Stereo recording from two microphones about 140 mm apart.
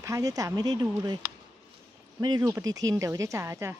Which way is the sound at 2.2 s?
25° right (ahead or behind).